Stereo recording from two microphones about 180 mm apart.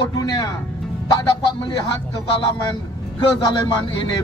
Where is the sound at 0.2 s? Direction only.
20° left (ahead or behind).